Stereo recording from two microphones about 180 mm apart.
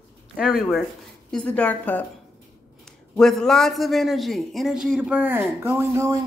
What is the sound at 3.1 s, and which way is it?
Speech, 5° left (ahead or behind).